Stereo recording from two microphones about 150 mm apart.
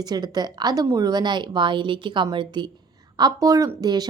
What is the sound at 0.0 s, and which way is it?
A woman's voice, 25° right (ahead or behind).